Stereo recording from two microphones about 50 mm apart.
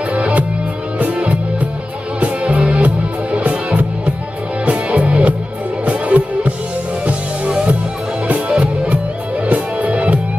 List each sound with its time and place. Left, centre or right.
0.1 s music: right